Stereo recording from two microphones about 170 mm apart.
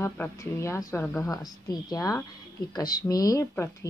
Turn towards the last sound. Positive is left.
turn(degrees=15)  # may be behind; listen again after turning